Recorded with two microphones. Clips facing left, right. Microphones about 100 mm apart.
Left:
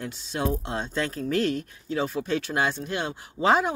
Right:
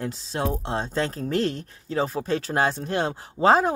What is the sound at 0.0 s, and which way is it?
Speech, 35° right (ahead or behind).